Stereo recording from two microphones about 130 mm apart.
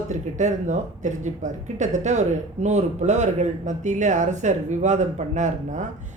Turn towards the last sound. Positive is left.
turn(degrees=-70)  # may be behind; listen again after turning